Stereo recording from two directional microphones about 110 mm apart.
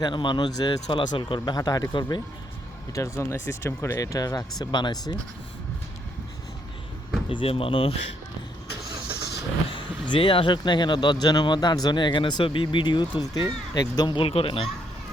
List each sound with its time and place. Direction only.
0.0 s speech: 45° left (ahead or behind)
2.9 s speech: 25° left (ahead or behind)
7.3 s speech: 55° left (ahead or behind)
9.6 s speech: 50° left (ahead or behind)
14.3 s speech: 55° left (ahead or behind)